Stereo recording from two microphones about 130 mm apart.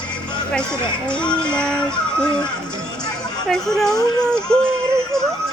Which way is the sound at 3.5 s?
5° left (ahead or behind).